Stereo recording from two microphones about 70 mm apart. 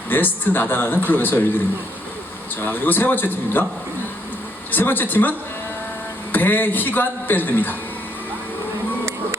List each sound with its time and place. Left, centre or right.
0.1 s a man's voice: left
2.6 s a man's voice: left
4.7 s a man's voice: left
6.3 s a man's voice: left